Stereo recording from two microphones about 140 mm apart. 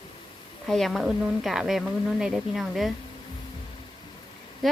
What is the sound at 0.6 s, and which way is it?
A woman's voice, centre (ahead or behind).